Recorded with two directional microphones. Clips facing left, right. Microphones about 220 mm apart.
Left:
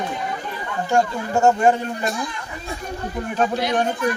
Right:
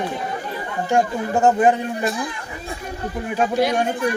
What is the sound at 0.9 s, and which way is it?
Speech, 15° right (ahead or behind).